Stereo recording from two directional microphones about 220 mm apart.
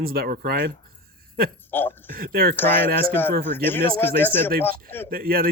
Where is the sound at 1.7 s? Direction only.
10° left (ahead or behind).